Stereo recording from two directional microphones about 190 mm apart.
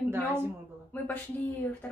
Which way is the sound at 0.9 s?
10° left (ahead or behind).